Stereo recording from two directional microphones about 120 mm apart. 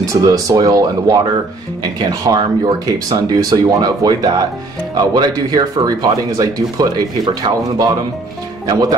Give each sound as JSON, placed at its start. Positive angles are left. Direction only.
{"t": 0.1, "sound": "speech", "side_deg": -30}